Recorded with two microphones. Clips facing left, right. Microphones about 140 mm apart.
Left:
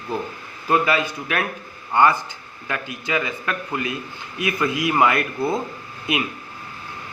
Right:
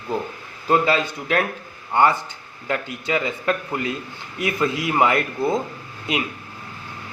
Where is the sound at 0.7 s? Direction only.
30° right (ahead or behind).